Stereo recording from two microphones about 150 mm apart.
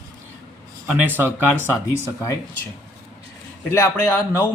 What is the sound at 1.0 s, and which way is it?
Speech, 10° right (ahead or behind).